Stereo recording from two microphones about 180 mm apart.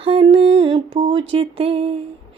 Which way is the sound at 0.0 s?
30° right (ahead or behind).